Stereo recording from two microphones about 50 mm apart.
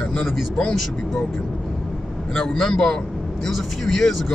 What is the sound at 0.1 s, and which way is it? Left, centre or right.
Speech, left.